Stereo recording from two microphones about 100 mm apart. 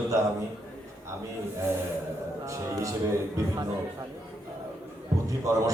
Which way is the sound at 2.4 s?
30° right (ahead or behind).